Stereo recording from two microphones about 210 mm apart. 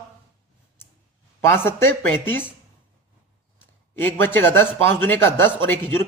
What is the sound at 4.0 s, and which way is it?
A man's voice, 10° left (ahead or behind).